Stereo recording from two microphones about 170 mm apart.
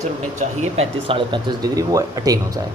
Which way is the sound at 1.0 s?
30° right (ahead or behind).